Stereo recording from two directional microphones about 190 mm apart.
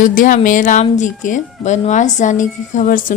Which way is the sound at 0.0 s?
45° left (ahead or behind).